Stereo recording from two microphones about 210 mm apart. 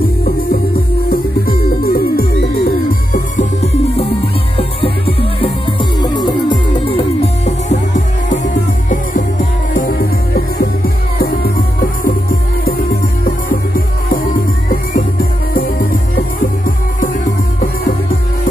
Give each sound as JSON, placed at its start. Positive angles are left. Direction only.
{"t": 1.8, "sound": "music", "side_deg": 45}
{"t": 8.8, "sound": "music", "side_deg": 40}